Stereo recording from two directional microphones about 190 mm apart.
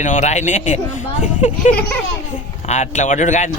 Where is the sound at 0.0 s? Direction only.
40° left (ahead or behind).